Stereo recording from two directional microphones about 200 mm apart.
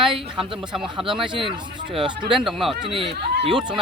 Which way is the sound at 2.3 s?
Centre (ahead or behind).